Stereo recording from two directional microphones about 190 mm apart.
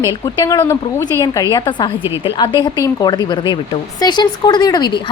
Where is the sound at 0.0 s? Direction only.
20° left (ahead or behind).